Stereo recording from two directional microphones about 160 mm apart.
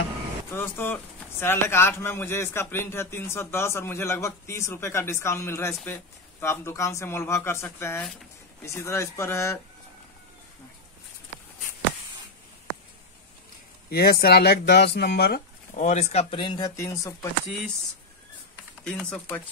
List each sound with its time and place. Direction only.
0.5 s a man's voice: 15° left (ahead or behind)
13.8 s speech: 75° left (ahead or behind); by 17.3 s 20° left (ahead or behind)
18.9 s a man's voice: 5° left (ahead or behind)